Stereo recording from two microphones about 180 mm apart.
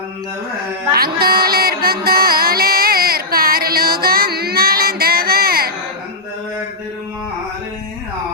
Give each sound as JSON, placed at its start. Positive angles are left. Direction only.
{"t": 0.9, "sound": "music", "side_deg": -55}